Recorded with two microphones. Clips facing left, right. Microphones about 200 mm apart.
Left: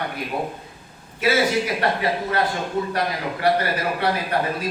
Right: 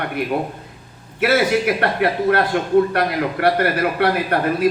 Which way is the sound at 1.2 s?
60° right (ahead or behind).